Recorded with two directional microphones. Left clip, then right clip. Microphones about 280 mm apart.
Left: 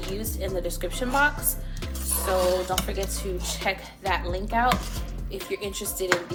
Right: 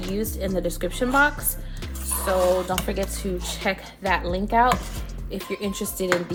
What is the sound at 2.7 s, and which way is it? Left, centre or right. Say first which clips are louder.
A woman's voice: right 2 dB; right.